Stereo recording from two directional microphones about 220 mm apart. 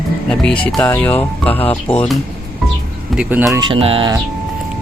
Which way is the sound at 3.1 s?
10° right (ahead or behind).